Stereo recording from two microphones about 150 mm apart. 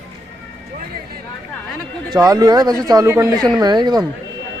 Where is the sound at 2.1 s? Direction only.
25° right (ahead or behind).